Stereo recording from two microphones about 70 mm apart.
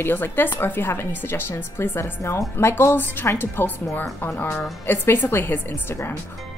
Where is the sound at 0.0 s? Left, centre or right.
Left.